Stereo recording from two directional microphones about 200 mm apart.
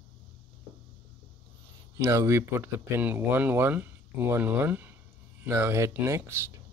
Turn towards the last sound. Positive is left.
turn(degrees=-15)  # may be behind; listen again after turning